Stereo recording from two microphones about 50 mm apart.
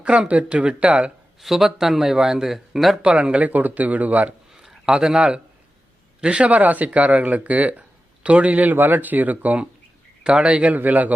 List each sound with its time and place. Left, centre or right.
0.0 s speech: right
1.4 s a man's voice: centre
3.0 s speech: right
4.5 s a sound: centre
6.1 s speech: right